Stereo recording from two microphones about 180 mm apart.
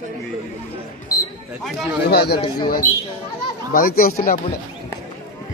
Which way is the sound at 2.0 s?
60° left (ahead or behind).